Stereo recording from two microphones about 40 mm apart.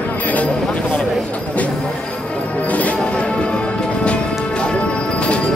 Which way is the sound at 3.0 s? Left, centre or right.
Left.